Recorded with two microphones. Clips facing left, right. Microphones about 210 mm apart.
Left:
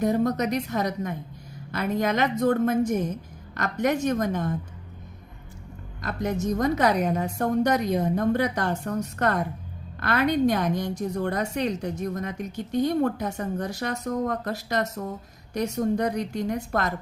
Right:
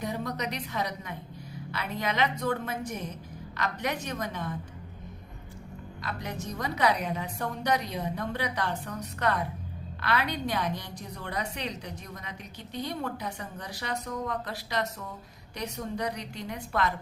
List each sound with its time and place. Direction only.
0.0 s a woman's voice: 45° left (ahead or behind)
6.0 s a woman's voice: 45° left (ahead or behind)